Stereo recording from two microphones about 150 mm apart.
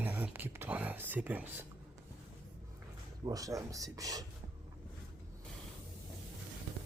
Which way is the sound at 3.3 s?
25° right (ahead or behind).